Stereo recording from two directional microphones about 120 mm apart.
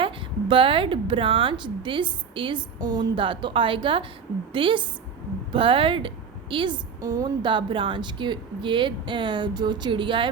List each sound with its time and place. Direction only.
0.0 s a woman's voice: 45° right (ahead or behind)
7.0 s a woman's voice: 30° right (ahead or behind)
7.4 s speech: 45° right (ahead or behind)